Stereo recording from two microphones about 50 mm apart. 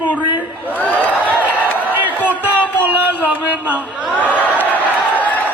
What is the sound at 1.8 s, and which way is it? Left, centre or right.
Crowd, right.